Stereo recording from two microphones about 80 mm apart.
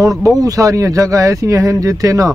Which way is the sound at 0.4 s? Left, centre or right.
Right.